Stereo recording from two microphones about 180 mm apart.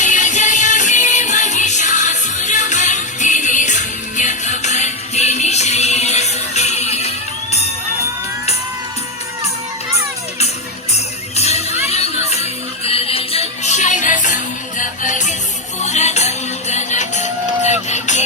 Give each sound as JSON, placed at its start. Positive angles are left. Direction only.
{"t": 0.0, "sound": "music", "side_deg": 45}
{"t": 10.9, "sound": "music", "side_deg": 35}